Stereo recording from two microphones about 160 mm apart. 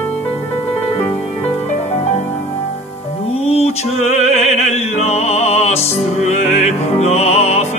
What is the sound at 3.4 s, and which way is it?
Music, 40° left (ahead or behind).